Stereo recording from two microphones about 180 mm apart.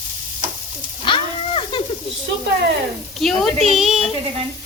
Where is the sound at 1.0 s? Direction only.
25° left (ahead or behind).